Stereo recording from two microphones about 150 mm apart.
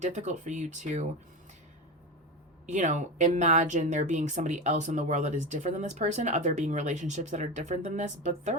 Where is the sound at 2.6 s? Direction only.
55° right (ahead or behind).